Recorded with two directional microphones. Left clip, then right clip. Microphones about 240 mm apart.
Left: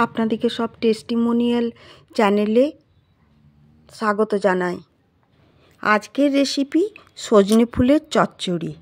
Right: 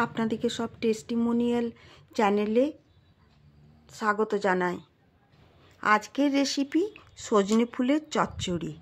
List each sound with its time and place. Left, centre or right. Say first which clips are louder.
0.0 s speech: left 8 dB; left
3.8 s speech: left 6 dB; left